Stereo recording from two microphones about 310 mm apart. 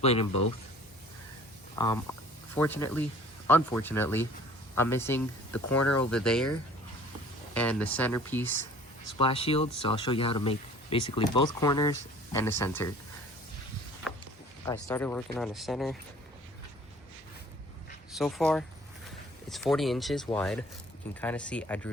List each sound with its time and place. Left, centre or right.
0.0 s a man's voice: centre
1.7 s speech: centre
7.5 s speech: centre
9.1 s speech: centre
14.6 s speech: centre
18.2 s speech: centre